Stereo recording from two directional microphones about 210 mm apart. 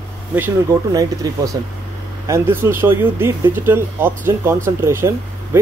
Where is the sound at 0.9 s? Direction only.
15° right (ahead or behind).